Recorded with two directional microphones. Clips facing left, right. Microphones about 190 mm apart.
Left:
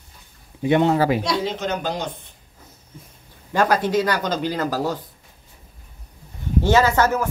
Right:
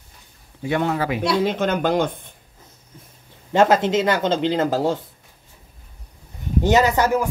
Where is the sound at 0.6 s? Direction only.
20° left (ahead or behind).